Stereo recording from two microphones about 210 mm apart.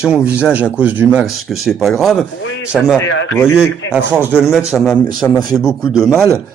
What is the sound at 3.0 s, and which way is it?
Speech, 65° left (ahead or behind).